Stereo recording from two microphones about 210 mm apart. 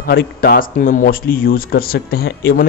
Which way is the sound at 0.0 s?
45° left (ahead or behind).